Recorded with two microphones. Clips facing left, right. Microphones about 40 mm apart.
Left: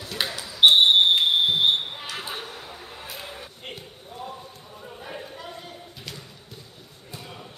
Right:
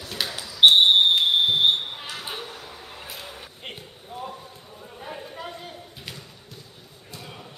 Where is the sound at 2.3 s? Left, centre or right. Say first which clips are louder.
Even; left.